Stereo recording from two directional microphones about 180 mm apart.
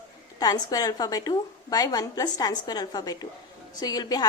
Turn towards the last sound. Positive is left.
turn(degrees=20)  # may be behind; listen again after turning